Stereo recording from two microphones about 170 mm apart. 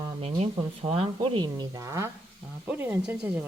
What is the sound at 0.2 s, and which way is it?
Speech, 35° right (ahead or behind).